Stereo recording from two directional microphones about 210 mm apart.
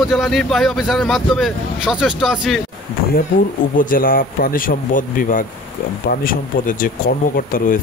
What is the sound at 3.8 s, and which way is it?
Speech, 40° left (ahead or behind).